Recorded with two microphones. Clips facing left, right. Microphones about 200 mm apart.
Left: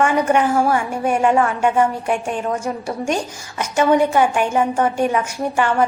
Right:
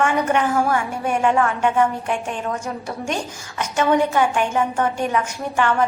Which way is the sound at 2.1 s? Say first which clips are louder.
Left 3 dB; 50° left (ahead or behind).